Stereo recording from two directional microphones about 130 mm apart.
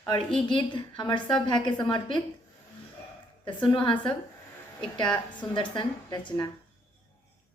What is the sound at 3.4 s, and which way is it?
Speech, 40° left (ahead or behind).